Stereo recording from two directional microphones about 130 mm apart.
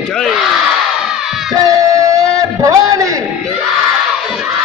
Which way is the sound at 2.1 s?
25° right (ahead or behind).